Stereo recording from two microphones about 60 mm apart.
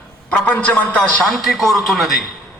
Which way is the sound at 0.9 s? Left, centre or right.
Centre.